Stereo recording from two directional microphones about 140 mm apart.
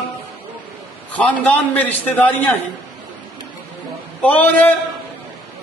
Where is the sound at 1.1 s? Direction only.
10° left (ahead or behind).